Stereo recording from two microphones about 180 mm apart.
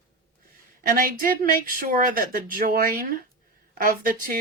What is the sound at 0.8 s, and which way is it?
Speech, 50° right (ahead or behind).